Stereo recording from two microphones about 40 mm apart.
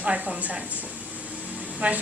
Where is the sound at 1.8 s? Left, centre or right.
Right.